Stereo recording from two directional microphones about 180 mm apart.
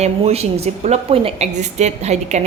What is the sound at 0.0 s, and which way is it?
A woman's voice, 35° right (ahead or behind).